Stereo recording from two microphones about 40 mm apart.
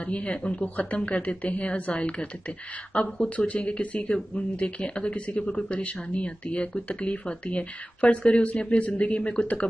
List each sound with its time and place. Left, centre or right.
0.0 s speech: left
0.7 s speech: left